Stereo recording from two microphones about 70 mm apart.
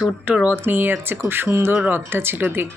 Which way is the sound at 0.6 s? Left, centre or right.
Right.